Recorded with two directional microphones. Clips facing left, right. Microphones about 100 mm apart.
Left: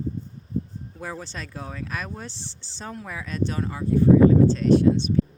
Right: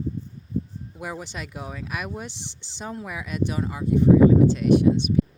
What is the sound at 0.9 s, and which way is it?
Speech, 15° right (ahead or behind).